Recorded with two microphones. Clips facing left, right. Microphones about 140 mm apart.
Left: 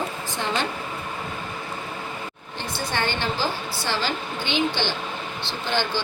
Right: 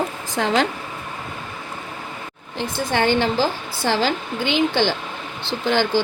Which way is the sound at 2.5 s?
90° right.